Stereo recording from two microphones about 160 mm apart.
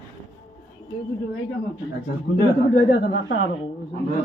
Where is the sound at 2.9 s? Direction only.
90° left.